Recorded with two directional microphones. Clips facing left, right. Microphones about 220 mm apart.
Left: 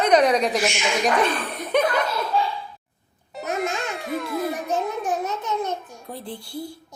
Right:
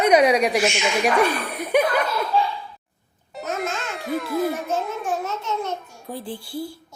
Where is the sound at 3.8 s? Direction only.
Centre (ahead or behind).